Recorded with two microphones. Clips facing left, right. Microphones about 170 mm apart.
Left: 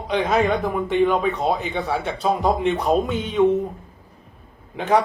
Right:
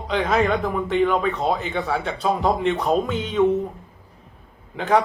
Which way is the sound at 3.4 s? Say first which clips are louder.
Left 1 dB; 20° left (ahead or behind).